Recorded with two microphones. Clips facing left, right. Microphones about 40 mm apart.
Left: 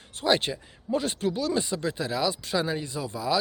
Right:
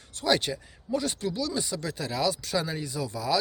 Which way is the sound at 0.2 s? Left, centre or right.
Left.